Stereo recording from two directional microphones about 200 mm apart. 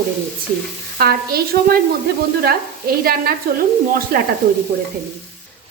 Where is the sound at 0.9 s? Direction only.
50° right (ahead or behind).